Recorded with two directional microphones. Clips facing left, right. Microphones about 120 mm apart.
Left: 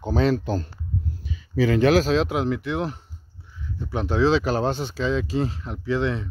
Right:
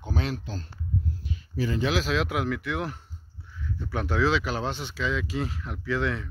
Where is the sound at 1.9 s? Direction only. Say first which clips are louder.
Left 7 dB; 35° left (ahead or behind).